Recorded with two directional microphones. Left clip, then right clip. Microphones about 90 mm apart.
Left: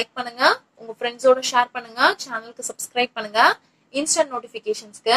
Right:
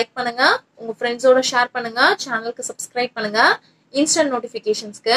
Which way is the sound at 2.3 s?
20° right (ahead or behind).